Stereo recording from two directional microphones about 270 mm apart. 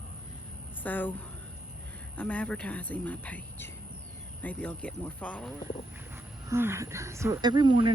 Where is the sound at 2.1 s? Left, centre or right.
Centre.